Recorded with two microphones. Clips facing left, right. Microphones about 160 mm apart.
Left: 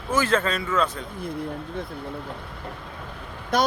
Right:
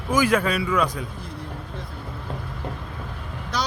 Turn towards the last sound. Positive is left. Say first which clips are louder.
# left 6 dB
turn(degrees=50)  # may be behind; listen again after turning